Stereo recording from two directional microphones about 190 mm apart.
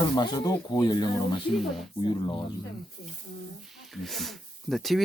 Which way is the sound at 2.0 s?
25° left (ahead or behind).